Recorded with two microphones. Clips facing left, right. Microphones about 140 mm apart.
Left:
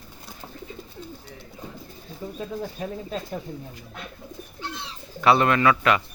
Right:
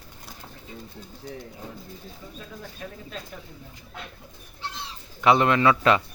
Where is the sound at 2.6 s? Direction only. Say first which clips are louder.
Left 7 dB; 35° left (ahead or behind).